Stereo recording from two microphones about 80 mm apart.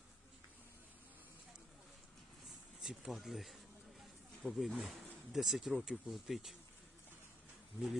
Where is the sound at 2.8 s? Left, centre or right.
Centre.